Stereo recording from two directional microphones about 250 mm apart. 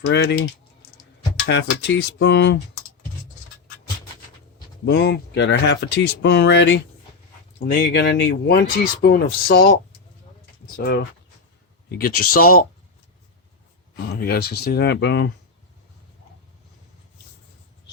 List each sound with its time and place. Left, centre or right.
0.0 s speech: left
1.5 s speech: left
4.9 s speech: left
10.8 s speech: left
12.3 s speech: left
14.1 s speech: left